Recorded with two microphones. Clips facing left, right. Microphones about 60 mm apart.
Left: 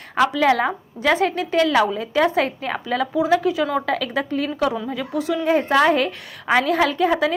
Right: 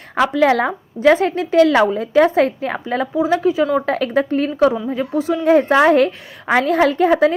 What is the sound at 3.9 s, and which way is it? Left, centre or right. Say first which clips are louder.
A woman's voice: right 5 dB; right.